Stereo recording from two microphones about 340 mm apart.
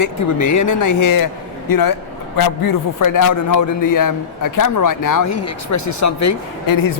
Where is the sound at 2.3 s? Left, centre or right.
Left.